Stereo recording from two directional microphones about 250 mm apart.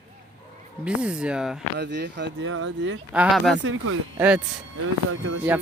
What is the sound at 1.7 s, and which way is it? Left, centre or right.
Speech, right.